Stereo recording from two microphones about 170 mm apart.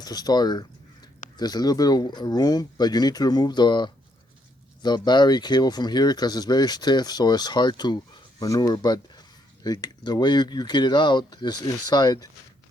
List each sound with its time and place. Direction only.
0.0 s speech: 25° left (ahead or behind)